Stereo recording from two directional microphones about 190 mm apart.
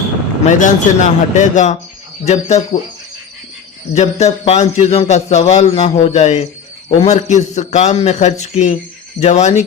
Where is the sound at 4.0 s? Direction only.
35° left (ahead or behind).